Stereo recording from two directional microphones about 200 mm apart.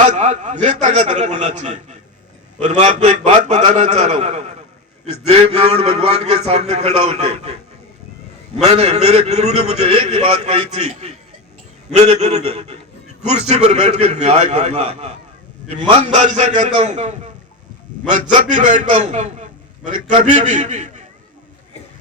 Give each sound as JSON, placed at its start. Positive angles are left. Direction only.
{"t": 0.0, "sound": "a man's voice", "side_deg": -40}
{"t": 8.6, "sound": "a man's voice", "side_deg": -35}